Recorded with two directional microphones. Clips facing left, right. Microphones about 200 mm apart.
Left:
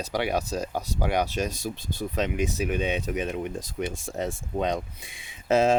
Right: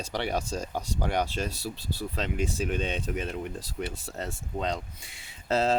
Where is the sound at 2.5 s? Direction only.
10° left (ahead or behind).